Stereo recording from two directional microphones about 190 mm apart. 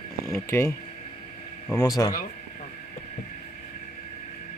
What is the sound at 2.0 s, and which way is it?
Speech, 15° left (ahead or behind).